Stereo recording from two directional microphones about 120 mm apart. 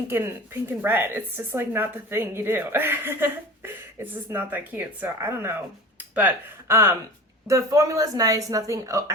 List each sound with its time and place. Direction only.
0.1 s a woman's voice: 20° right (ahead or behind)